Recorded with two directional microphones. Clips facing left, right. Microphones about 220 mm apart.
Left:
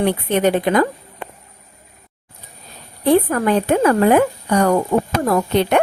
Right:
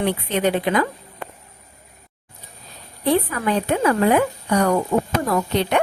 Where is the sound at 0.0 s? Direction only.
50° left (ahead or behind).